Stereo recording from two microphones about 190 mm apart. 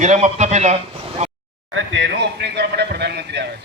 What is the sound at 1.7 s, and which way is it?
Speech, 75° right (ahead or behind).